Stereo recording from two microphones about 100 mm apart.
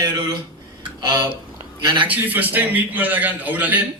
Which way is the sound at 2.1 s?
20° right (ahead or behind).